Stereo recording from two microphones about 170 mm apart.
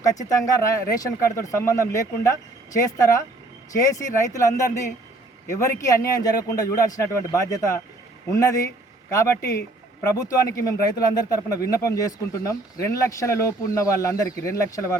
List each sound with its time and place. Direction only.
0.0 s speech: 20° left (ahead or behind)
10.0 s speech: 20° left (ahead or behind)